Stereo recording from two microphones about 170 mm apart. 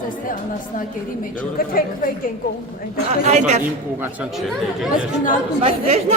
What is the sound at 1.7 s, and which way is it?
Speech, 55° left (ahead or behind).